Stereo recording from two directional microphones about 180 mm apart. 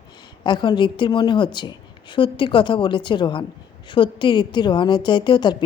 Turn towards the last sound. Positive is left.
turn(degrees=25)  # may be behind; listen again after turning